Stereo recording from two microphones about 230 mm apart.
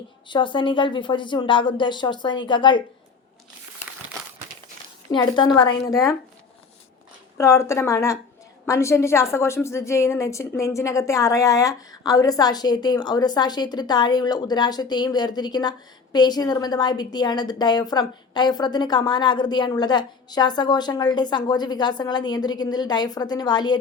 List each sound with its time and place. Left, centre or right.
0.3 s speech: left
5.1 s a woman's voice: centre
7.3 s a woman's voice: centre